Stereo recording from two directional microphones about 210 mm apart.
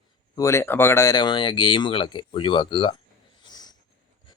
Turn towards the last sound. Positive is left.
turn(degrees=20)  # may be behind; listen again after turning